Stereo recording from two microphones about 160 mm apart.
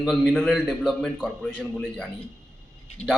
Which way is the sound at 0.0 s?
Centre (ahead or behind).